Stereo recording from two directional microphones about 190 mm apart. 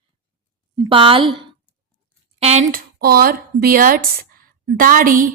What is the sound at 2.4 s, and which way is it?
Speech, 35° right (ahead or behind).